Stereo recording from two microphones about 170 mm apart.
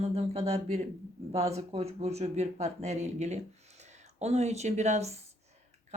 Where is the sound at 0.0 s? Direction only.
35° right (ahead or behind).